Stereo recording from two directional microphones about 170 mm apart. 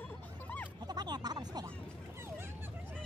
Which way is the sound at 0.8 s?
25° right (ahead or behind).